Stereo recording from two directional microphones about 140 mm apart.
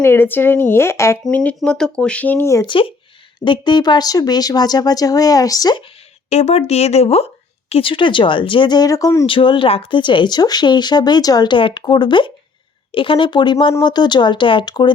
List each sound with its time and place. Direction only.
0.0 s speech: 15° left (ahead or behind)
1.2 s speech: 5° left (ahead or behind)
2.6 s speech: 40° left (ahead or behind)
6.3 s speech: 50° left (ahead or behind); by 9.2 s 25° left (ahead or behind)
9.2 s speech: 35° left (ahead or behind)